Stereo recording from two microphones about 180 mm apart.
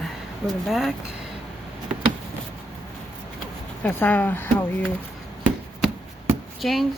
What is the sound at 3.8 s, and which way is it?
Speech, 10° left (ahead or behind).